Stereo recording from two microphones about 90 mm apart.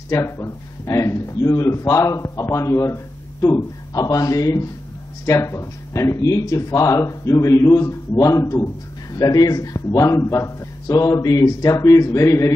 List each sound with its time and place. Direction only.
0.1 s a man's voice: 30° left (ahead or behind)